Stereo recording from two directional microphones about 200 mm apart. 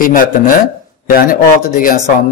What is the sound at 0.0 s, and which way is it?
Speech, 45° left (ahead or behind).